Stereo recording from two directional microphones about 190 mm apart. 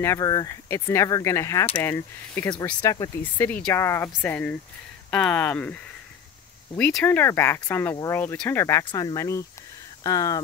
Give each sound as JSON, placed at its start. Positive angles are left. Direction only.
{"t": 0.0, "sound": "speech", "side_deg": 15}
{"t": 6.8, "sound": "speech", "side_deg": 5}